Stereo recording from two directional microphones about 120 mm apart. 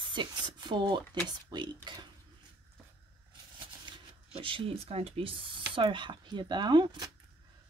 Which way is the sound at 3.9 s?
40° right (ahead or behind).